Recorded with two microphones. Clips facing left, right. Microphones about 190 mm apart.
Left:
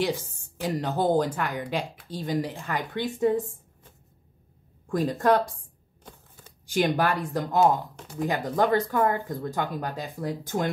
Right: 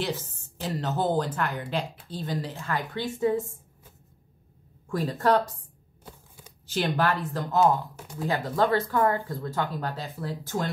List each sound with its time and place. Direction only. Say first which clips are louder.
0.0 s speech: left 4 dB; 15° left (ahead or behind)
5.0 s speech: left 1 dB; 15° left (ahead or behind)
6.0 s a sound: right 1 dB; 10° right (ahead or behind)
6.7 s speech: left 2 dB; 15° left (ahead or behind)